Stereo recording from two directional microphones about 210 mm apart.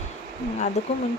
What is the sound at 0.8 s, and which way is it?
Speech, 30° left (ahead or behind).